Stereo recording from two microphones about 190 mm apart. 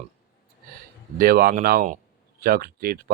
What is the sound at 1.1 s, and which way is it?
Speech, 50° right (ahead or behind).